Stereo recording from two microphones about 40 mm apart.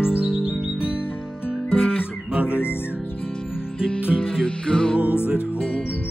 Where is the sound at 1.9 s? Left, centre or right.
Right.